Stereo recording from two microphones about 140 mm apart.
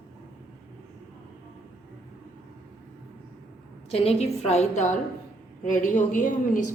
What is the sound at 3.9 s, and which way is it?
A woman's voice, 45° left (ahead or behind).